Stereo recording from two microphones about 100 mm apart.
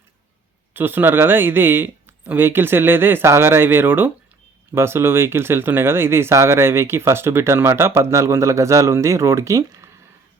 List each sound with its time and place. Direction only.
0.7 s speech: 20° right (ahead or behind)